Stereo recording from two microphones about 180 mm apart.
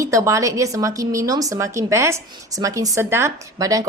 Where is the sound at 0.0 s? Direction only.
15° right (ahead or behind).